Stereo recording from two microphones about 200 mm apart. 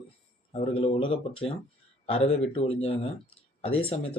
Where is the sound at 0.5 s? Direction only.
25° left (ahead or behind).